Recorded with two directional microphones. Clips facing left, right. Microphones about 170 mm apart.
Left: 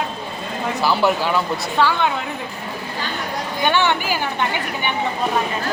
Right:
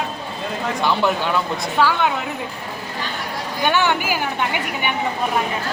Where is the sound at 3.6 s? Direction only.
10° right (ahead or behind).